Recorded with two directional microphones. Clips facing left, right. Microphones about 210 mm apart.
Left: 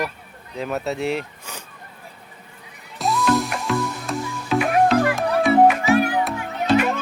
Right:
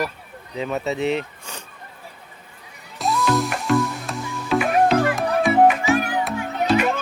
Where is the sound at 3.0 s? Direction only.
Centre (ahead or behind).